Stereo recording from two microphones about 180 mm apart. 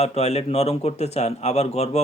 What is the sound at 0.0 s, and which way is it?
A man's voice, 35° left (ahead or behind).